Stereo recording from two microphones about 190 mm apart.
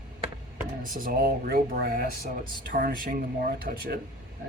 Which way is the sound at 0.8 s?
45° right (ahead or behind).